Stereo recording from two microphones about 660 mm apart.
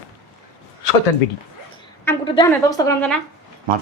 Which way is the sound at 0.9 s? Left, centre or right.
Left.